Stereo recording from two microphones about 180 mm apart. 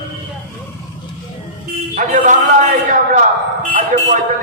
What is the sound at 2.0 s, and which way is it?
A man's voice, 45° right (ahead or behind).